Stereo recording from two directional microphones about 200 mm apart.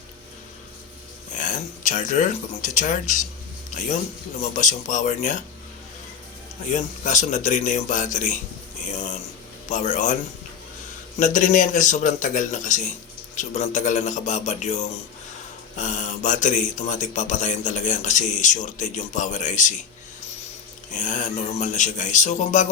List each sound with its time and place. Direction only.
1.3 s speech: 40° left (ahead or behind)
6.7 s speech: 40° left (ahead or behind)
11.2 s speech: 40° left (ahead or behind)
20.9 s speech: 40° left (ahead or behind)